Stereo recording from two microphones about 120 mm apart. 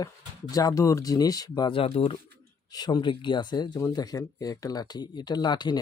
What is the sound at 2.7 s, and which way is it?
Speech, 35° left (ahead or behind).